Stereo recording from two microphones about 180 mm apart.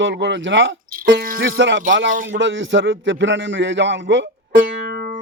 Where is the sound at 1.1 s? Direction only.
55° right (ahead or behind).